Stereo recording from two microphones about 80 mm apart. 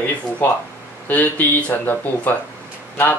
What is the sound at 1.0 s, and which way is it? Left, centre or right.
Speech, left.